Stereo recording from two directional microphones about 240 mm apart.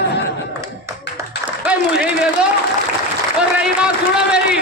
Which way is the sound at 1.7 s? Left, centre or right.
Centre.